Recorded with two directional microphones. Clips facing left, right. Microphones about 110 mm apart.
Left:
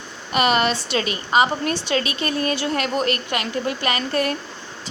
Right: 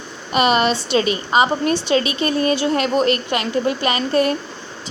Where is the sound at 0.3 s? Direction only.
25° right (ahead or behind).